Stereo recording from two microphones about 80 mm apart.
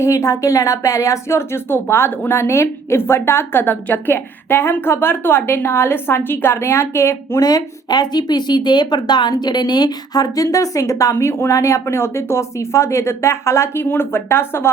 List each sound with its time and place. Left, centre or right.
0.0 s speech: left
7.4 s speech: left